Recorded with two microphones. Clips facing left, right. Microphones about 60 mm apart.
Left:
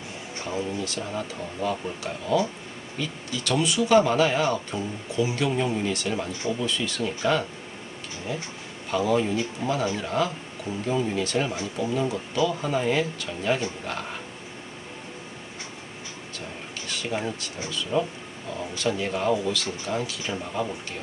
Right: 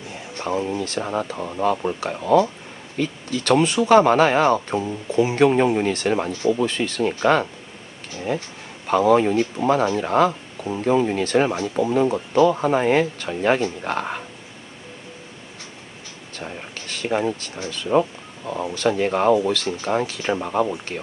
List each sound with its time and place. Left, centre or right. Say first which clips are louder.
0.4 s speech: right 6 dB; right
5.5 s speech: right 7 dB; right
16.3 s speech: right 6 dB; right